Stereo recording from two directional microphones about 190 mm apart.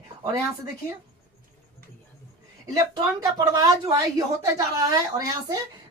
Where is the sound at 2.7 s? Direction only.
20° right (ahead or behind).